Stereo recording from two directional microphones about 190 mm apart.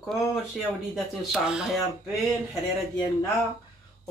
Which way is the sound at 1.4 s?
5° right (ahead or behind).